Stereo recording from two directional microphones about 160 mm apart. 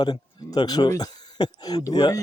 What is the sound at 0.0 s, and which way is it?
Speech, 25° left (ahead or behind).